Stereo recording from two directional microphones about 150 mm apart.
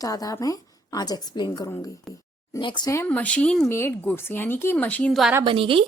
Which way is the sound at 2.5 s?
30° left (ahead or behind).